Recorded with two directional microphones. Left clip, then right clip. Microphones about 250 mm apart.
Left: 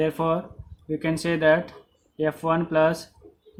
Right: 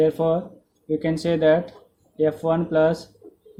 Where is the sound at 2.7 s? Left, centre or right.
Left.